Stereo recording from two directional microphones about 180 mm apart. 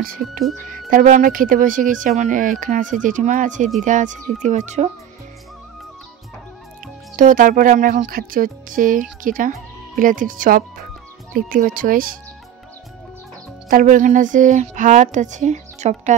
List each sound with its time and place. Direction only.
0.8 s speech: 45° right (ahead or behind)
7.2 s speech: 45° right (ahead or behind)
13.7 s speech: 50° right (ahead or behind)